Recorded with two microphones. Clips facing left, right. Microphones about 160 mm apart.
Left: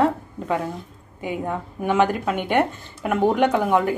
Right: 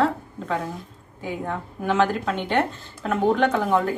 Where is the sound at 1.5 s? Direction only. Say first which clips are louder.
Left 1 dB; 10° left (ahead or behind).